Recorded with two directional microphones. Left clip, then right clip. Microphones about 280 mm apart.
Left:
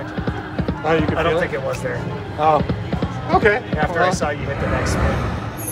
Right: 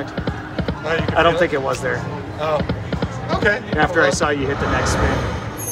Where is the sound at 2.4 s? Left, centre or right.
Left.